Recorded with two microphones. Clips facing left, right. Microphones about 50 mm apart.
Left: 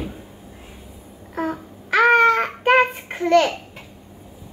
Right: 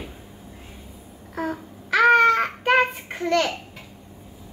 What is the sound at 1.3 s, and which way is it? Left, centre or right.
Babbling, left.